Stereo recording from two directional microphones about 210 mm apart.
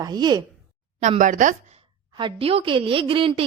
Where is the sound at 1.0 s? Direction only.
35° right (ahead or behind).